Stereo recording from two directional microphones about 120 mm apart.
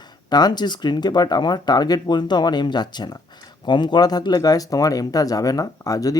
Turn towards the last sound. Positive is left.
turn(degrees=30)  # may be behind; listen again after turning